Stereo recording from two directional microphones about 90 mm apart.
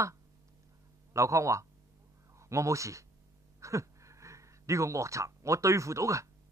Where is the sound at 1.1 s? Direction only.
35° right (ahead or behind).